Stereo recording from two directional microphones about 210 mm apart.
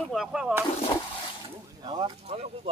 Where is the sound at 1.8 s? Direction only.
25° right (ahead or behind).